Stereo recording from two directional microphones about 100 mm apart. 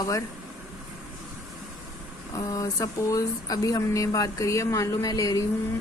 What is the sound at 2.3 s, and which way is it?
Speech, 35° left (ahead or behind).